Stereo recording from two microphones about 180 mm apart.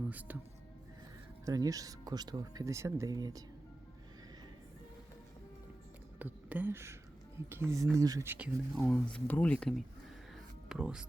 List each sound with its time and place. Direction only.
0.1 s speech: 10° right (ahead or behind)
1.5 s speech: 20° right (ahead or behind)
6.1 s speech: 10° right (ahead or behind)
8.7 s speech: centre (ahead or behind)